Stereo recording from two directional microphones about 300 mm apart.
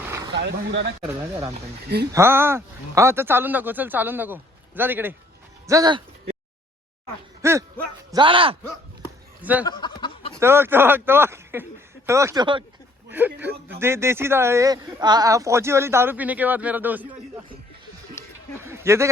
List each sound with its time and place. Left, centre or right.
0.0 s a sound: centre
0.3 s speech: right
1.0 s speech: centre
5.6 s music: centre
7.4 s speech: centre
9.0 s a sound: centre
9.6 s a sound: centre
10.4 s speech: centre
18.6 s speech: centre